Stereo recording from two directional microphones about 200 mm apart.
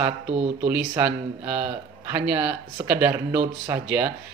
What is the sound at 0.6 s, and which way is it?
Speech, 10° right (ahead or behind).